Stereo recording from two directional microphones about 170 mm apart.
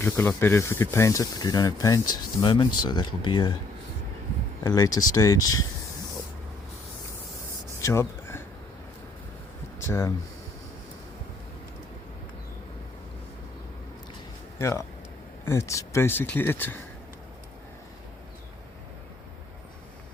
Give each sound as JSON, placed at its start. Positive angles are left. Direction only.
{"t": 0.0, "sound": "speech", "side_deg": 15}
{"t": 4.6, "sound": "speech", "side_deg": 20}
{"t": 7.8, "sound": "a sound", "side_deg": 15}
{"t": 9.8, "sound": "speech", "side_deg": 15}
{"t": 14.6, "sound": "speech", "side_deg": 15}